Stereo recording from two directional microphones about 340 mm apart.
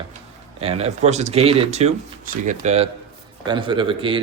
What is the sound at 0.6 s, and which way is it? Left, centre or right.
Speech, centre.